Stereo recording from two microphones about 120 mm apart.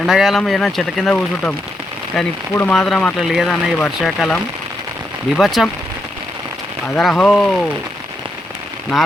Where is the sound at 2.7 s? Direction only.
5° left (ahead or behind).